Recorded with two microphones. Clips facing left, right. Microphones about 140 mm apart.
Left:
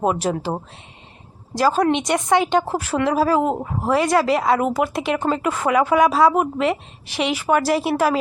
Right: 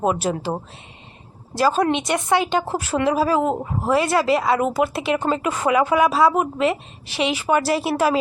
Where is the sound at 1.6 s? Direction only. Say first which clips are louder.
Left 1 dB; 15° right (ahead or behind).